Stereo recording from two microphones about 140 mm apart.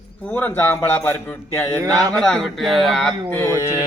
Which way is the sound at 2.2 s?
5° left (ahead or behind).